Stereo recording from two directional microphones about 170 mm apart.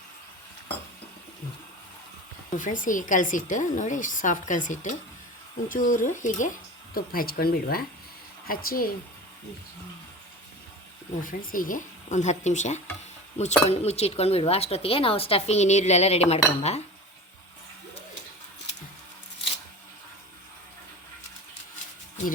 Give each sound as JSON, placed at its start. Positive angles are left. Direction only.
{"t": 2.6, "sound": "a woman's voice", "side_deg": 50}
{"t": 11.2, "sound": "a woman's voice", "side_deg": 50}